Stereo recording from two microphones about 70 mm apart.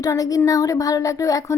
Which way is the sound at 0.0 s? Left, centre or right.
Left.